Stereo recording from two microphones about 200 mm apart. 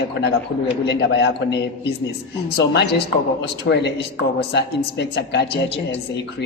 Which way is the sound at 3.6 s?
55° left (ahead or behind).